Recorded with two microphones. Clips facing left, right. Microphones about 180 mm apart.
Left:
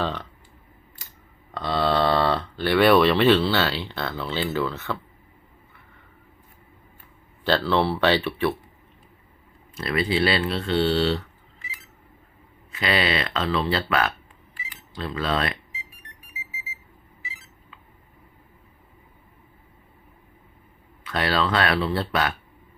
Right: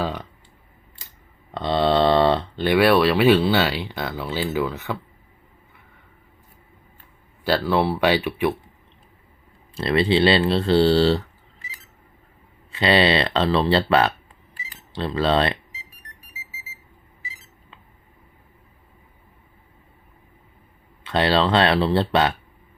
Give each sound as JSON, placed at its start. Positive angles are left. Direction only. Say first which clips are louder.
{"t": 0.0, "sound": "speech", "louder": "right 1 dB", "side_deg": -15}
{"t": 1.5, "sound": "mantra", "louder": "right 4 dB", "side_deg": -25}
{"t": 2.7, "sound": "speech", "louder": "even", "side_deg": -5}
{"t": 7.4, "sound": "speech", "louder": "right 1 dB", "side_deg": -10}
{"t": 9.7, "sound": "speech", "louder": "right 5 dB", "side_deg": -30}
{"t": 12.7, "sound": "speech", "louder": "right 6 dB", "side_deg": -30}
{"t": 14.5, "sound": "cutlery", "louder": "right 4 dB", "side_deg": -30}
{"t": 21.0, "sound": "speech", "louder": "right 5 dB", "side_deg": -25}